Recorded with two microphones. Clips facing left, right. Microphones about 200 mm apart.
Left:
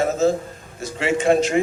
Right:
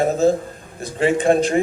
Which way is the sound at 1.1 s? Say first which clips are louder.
Left 1 dB; 35° right (ahead or behind).